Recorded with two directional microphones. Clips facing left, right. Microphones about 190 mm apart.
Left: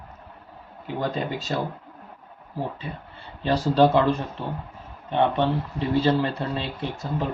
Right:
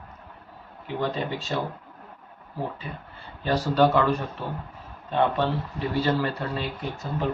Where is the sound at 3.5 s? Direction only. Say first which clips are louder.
Left 2 dB; 30° left (ahead or behind).